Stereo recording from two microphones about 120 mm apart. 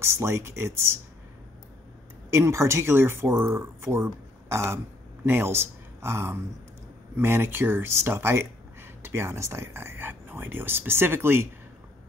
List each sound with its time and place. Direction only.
0.0 s speech: 20° right (ahead or behind)
2.3 s speech: 25° right (ahead or behind)